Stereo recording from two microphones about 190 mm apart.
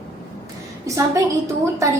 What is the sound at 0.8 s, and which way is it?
Speech, 15° right (ahead or behind).